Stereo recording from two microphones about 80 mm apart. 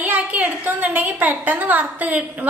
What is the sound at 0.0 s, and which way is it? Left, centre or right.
A woman's voice, right.